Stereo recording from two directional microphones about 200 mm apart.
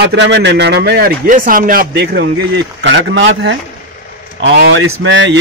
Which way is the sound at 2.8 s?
65° right (ahead or behind).